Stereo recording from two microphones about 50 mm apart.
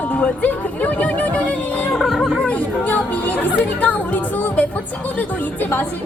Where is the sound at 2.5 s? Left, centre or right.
Left.